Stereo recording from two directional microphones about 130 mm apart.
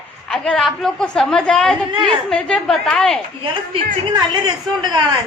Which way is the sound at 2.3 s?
5° left (ahead or behind).